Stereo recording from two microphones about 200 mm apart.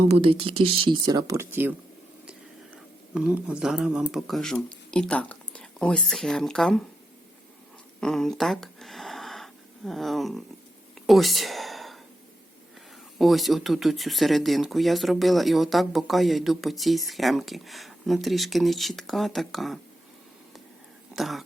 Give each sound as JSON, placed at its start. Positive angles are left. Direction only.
{"t": 0.1, "sound": "speech", "side_deg": -30}
{"t": 3.2, "sound": "speech", "side_deg": -5}
{"t": 8.0, "sound": "speech", "side_deg": 0}
{"t": 11.0, "sound": "a sound", "side_deg": 0}
{"t": 13.1, "sound": "speech", "side_deg": 0}
{"t": 21.1, "sound": "speech", "side_deg": 0}